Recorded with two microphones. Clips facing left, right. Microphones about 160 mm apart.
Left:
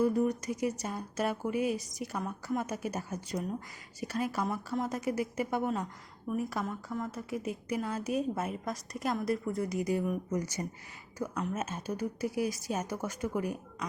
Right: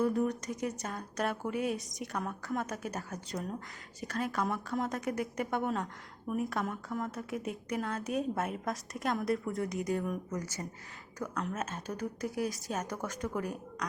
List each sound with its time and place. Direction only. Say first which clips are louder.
0.0 s a woman's voice: left 2 dB; centre (ahead or behind)
10.3 s speech: left 4 dB; 20° left (ahead or behind)
11.3 s a woman's voice: left 1 dB; 5° left (ahead or behind)